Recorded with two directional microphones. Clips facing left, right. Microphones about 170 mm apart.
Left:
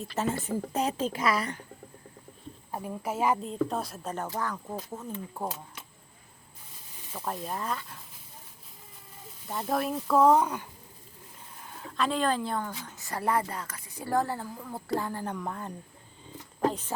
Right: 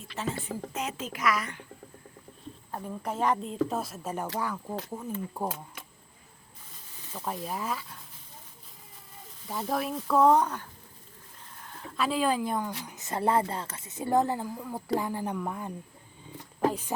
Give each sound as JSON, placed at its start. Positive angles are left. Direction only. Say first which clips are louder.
{"t": 0.1, "sound": "speech", "louder": "left 3 dB", "side_deg": 45}
{"t": 2.7, "sound": "a woman's voice", "louder": "left 1 dB", "side_deg": 10}
{"t": 7.3, "sound": "speech", "louder": "even", "side_deg": -5}
{"t": 9.5, "sound": "speech", "louder": "left 1 dB", "side_deg": 0}
{"t": 11.6, "sound": "a woman's voice", "louder": "left 1 dB", "side_deg": 0}